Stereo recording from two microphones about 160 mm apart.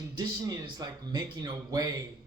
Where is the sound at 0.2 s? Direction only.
25° right (ahead or behind).